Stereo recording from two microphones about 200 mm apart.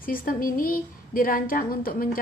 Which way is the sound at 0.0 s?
45° left (ahead or behind).